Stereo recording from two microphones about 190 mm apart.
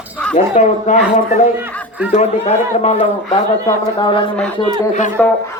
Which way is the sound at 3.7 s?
25° left (ahead or behind).